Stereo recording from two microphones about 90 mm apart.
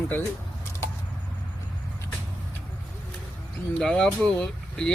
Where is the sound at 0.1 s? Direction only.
30° left (ahead or behind).